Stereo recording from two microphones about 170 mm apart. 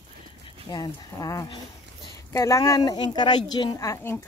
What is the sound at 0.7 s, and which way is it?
Speech, 20° left (ahead or behind).